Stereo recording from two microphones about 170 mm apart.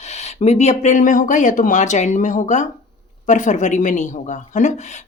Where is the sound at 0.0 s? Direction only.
40° left (ahead or behind).